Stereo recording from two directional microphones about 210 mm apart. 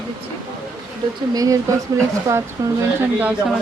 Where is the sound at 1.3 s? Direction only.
15° right (ahead or behind).